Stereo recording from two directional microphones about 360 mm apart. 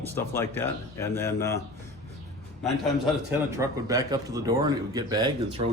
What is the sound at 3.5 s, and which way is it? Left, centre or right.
Speech, centre.